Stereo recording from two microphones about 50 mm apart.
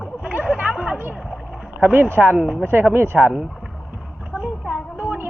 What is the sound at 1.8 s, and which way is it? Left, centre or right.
Speech, right.